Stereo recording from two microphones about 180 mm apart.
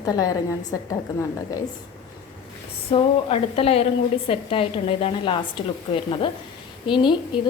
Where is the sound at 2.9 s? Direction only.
30° left (ahead or behind).